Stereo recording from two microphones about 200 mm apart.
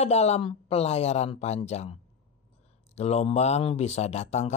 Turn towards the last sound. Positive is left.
turn(degrees=35)  # may be behind; listen again after turning